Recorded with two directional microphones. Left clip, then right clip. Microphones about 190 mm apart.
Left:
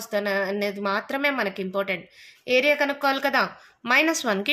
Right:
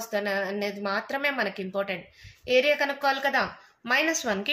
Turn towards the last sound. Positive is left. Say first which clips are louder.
# left 4 dB
turn(degrees=40)  # may be behind; listen again after turning